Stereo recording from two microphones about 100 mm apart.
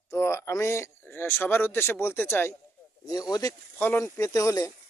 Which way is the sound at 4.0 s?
35° left (ahead or behind).